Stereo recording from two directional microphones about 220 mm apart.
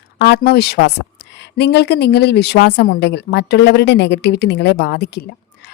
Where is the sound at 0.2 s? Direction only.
50° left (ahead or behind).